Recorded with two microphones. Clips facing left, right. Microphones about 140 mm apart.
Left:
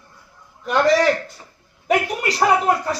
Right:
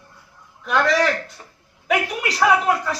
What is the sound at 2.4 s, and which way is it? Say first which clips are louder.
Speech: even; 40° left (ahead or behind).